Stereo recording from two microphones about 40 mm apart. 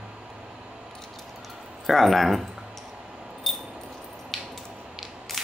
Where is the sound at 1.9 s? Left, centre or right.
Centre.